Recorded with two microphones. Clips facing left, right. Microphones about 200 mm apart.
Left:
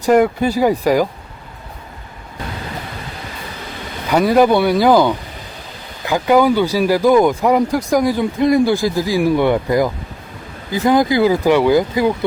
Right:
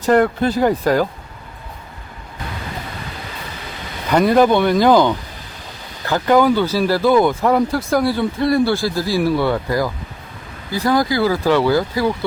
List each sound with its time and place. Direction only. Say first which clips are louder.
0.0 s speech: left 2 dB; 10° left (ahead or behind)
4.1 s speech: left 1 dB; 5° left (ahead or behind)